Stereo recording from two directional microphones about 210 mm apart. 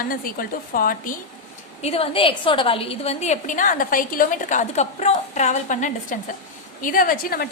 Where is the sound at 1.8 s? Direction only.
30° left (ahead or behind).